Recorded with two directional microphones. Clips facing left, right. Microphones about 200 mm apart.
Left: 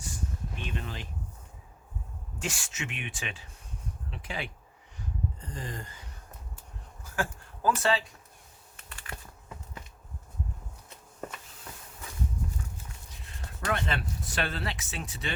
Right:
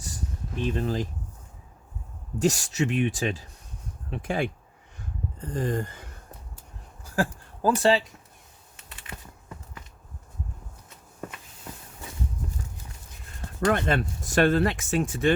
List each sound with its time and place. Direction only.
0.6 s speech: 35° right (ahead or behind)
2.4 s speech: 40° right (ahead or behind)
4.1 s a sound: 50° right (ahead or behind)
7.2 s speech: 35° right (ahead or behind)
8.7 s computer keyboard: 20° right (ahead or behind)
13.3 s speech: 45° right (ahead or behind)